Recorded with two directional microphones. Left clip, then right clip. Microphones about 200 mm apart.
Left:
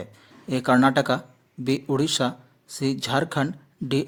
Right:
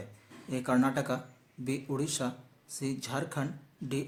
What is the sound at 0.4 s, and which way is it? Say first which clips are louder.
Speech: left 10 dB; 45° left (ahead or behind).